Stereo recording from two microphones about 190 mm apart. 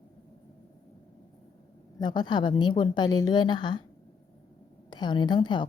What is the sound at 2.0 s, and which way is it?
A woman's voice, 25° left (ahead or behind).